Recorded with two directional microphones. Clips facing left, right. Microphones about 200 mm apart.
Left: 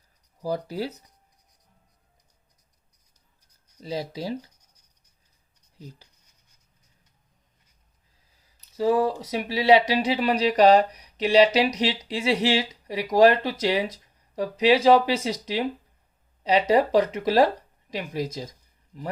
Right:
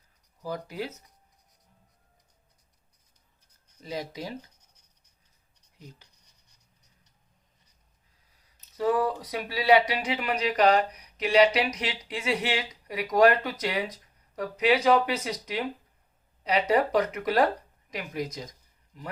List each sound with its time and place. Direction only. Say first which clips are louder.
0.4 s speech: left 5 dB; 35° left (ahead or behind)
3.8 s speech: left 4 dB; 30° left (ahead or behind)
8.3 s speech: left 2 dB; 25° left (ahead or behind)